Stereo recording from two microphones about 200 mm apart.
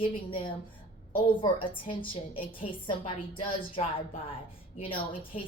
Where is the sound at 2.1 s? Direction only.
25° left (ahead or behind).